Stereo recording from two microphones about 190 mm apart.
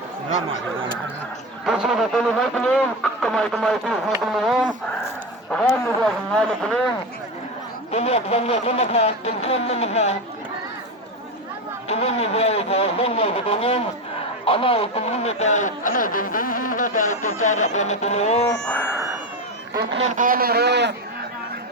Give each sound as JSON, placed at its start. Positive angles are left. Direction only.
{"t": 1.6, "sound": "speech", "side_deg": 0}
{"t": 7.9, "sound": "a man's voice", "side_deg": 35}
{"t": 11.9, "sound": "a man's voice", "side_deg": 35}
{"t": 19.9, "sound": "speech", "side_deg": -35}